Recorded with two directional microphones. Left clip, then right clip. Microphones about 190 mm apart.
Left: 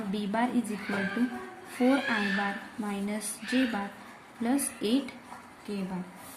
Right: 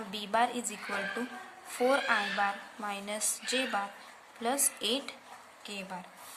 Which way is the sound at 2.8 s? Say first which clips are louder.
Even; 35° right (ahead or behind).